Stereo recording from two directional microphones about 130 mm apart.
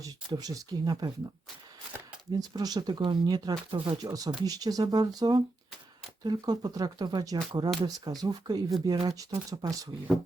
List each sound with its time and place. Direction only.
0.0 s speech: 30° right (ahead or behind)
2.3 s speech: 35° right (ahead or behind)